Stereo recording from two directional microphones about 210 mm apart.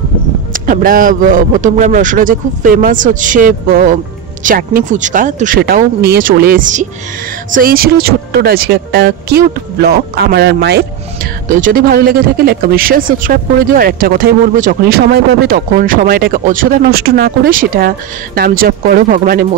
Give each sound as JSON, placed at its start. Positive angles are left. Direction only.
{"t": 0.5, "sound": "a man's voice", "side_deg": -40}
{"t": 11.4, "sound": "speech", "side_deg": -40}